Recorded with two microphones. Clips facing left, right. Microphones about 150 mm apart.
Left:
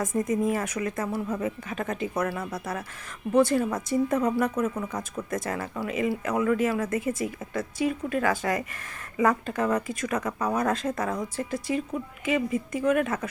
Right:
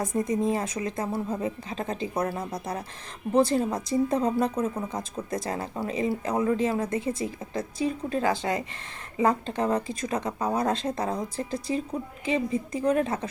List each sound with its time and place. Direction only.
0.0 s speech: 30° right (ahead or behind)